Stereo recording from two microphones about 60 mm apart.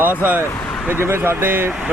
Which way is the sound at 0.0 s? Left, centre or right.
Right.